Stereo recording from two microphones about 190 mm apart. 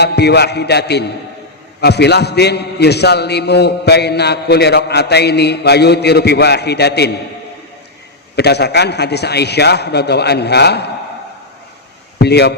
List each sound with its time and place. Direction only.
0.0 s a man's voice: 60° left (ahead or behind)
8.4 s a man's voice: 60° left (ahead or behind)
12.2 s a man's voice: 60° left (ahead or behind)